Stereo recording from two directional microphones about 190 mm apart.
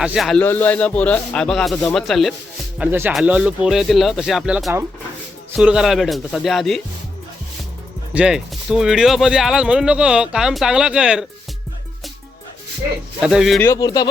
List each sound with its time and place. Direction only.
0.0 s speech: 5° right (ahead or behind)
8.1 s speech: 5° right (ahead or behind)
13.2 s speech: centre (ahead or behind)
13.6 s speech: 15° left (ahead or behind)